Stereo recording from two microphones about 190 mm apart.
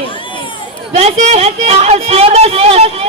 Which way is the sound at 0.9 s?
35° right (ahead or behind).